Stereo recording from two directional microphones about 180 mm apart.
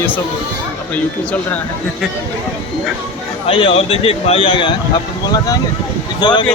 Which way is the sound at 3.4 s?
30° left (ahead or behind).